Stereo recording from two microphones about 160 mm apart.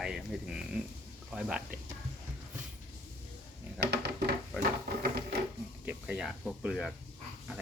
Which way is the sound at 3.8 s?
90° right.